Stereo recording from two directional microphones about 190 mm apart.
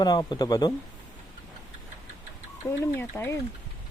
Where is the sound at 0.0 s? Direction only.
20° left (ahead or behind).